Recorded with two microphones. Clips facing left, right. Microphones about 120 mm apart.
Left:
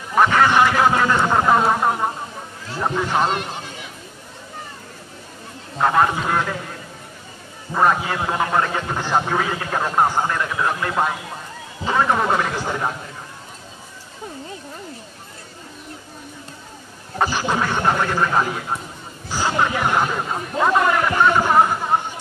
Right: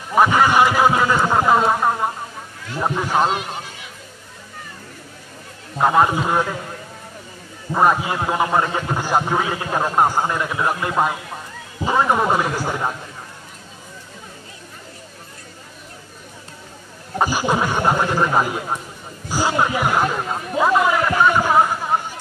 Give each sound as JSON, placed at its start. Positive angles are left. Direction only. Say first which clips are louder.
{"t": 0.1, "sound": "a sound", "louder": "right 1 dB", "side_deg": -10}
{"t": 2.8, "sound": "a man's voice", "louder": "right 1 dB", "side_deg": -10}
{"t": 5.8, "sound": "a man's voice", "louder": "right 2 dB", "side_deg": -15}
{"t": 7.7, "sound": "a man's voice", "louder": "right 1 dB", "side_deg": -15}
{"t": 17.2, "sound": "a man's voice", "louder": "right 2 dB", "side_deg": -10}